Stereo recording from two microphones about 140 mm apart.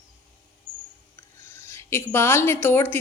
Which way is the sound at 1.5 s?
20° left (ahead or behind).